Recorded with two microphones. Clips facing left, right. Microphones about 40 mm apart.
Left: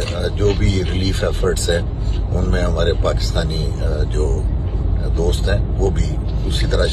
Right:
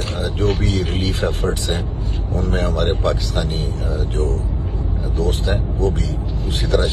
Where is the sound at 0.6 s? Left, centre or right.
Left.